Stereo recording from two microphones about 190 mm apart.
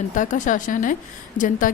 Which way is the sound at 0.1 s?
40° left (ahead or behind).